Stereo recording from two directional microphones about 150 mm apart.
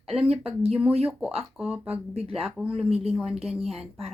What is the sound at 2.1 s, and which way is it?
Speech, 40° right (ahead or behind).